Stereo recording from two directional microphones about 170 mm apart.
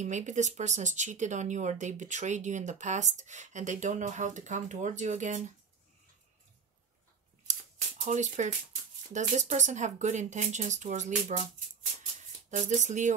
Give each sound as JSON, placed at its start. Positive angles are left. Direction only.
{"t": 0.0, "sound": "speech", "side_deg": -45}
{"t": 8.0, "sound": "speech", "side_deg": -45}
{"t": 12.4, "sound": "speech", "side_deg": -45}